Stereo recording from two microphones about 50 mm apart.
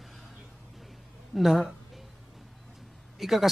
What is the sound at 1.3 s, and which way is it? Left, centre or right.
Speech, centre.